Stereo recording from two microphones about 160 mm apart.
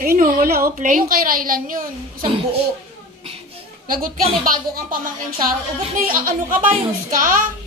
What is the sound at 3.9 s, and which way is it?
A woman's voice, 60° right (ahead or behind).